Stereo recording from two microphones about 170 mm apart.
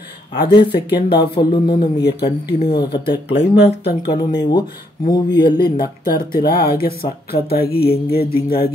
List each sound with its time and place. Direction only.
0.5 s speech: 25° left (ahead or behind)
0.7 s speech: 65° left (ahead or behind)
1.0 s speech: 30° left (ahead or behind)
1.8 s speech: 75° left (ahead or behind)
2.6 s speech: 25° left (ahead or behind)
3.8 s speech: 70° left (ahead or behind)
4.2 s speech: 25° left (ahead or behind)
6.0 s speech: 65° left (ahead or behind)